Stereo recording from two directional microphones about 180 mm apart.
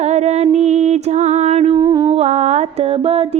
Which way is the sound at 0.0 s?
40° right (ahead or behind).